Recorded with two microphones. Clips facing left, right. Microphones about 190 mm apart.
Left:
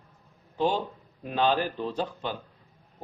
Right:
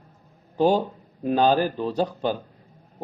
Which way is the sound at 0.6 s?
40° right (ahead or behind).